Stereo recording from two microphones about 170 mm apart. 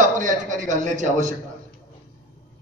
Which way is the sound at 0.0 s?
50° right (ahead or behind).